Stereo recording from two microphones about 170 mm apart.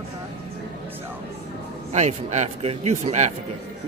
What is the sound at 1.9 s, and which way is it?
Speech, 40° right (ahead or behind).